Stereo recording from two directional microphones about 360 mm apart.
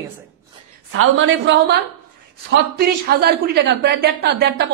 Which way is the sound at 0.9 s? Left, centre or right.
Right.